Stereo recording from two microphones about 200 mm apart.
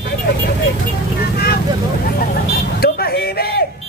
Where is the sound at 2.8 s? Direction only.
50° left (ahead or behind).